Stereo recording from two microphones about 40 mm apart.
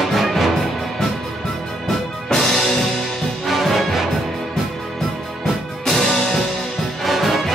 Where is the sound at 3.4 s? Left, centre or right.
Centre.